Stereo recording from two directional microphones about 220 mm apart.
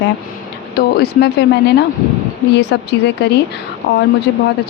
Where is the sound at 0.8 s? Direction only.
45° left (ahead or behind).